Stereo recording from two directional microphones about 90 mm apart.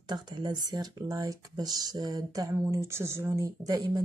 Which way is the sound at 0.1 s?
55° right (ahead or behind).